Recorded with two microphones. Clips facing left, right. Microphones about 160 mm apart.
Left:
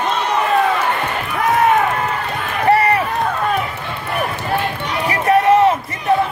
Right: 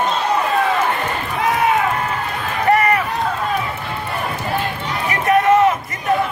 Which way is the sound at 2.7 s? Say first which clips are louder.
Even; 30° left (ahead or behind).